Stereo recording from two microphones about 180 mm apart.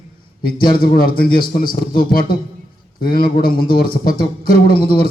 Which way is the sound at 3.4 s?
55° left (ahead or behind).